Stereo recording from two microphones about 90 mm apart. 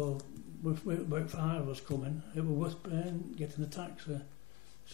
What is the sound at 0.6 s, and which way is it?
Speech, 30° right (ahead or behind).